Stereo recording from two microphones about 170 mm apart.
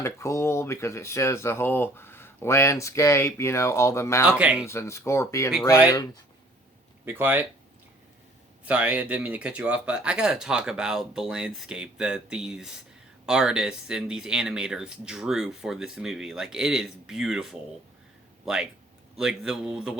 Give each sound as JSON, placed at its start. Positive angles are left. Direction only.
{"t": 0.0, "sound": "speech", "side_deg": 15}
{"t": 4.3, "sound": "speech", "side_deg": -5}
{"t": 4.6, "sound": "speech", "side_deg": 15}
{"t": 7.0, "sound": "speech", "side_deg": -10}
{"t": 8.6, "sound": "speech", "side_deg": -10}